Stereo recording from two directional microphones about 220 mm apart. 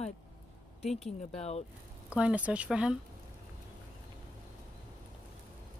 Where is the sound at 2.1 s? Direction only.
5° right (ahead or behind).